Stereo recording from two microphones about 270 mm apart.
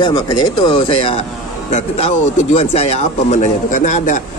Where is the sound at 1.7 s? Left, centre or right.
Left.